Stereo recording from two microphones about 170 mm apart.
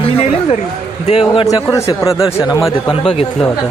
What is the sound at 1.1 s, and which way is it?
Speech, 35° left (ahead or behind).